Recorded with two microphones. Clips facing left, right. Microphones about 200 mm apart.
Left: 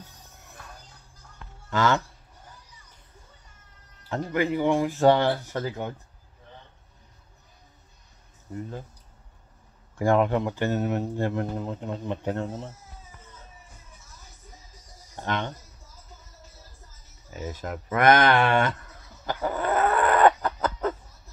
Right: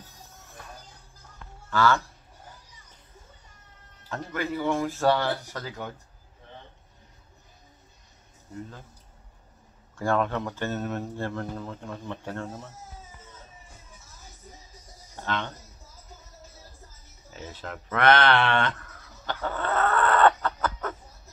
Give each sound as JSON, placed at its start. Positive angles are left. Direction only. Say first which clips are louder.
{"t": 1.7, "sound": "speech", "louder": "even", "side_deg": 20}
{"t": 4.1, "sound": "speech", "louder": "left 5 dB", "side_deg": 15}
{"t": 9.9, "sound": "speech", "louder": "left 4 dB", "side_deg": 15}
{"t": 15.2, "sound": "speech", "louder": "left 2 dB", "side_deg": 15}
{"t": 17.3, "sound": "speech", "louder": "left 5 dB", "side_deg": 10}
{"t": 19.2, "sound": "chicken", "louder": "left 3 dB", "side_deg": 10}